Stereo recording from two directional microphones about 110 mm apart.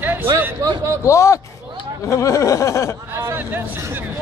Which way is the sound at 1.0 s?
25° left (ahead or behind).